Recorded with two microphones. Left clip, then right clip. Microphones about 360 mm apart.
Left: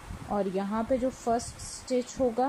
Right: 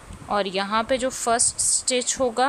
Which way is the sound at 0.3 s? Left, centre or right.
Right.